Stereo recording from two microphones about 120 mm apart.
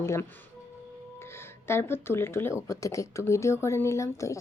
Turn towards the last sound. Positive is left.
turn(degrees=25)  # may be behind; listen again after turning